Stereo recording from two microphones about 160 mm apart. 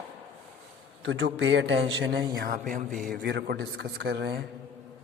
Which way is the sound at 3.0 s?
75° right (ahead or behind).